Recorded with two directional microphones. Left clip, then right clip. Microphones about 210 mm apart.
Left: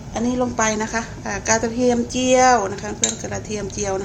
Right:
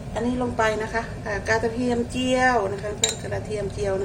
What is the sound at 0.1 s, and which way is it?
A woman's voice, 50° left (ahead or behind).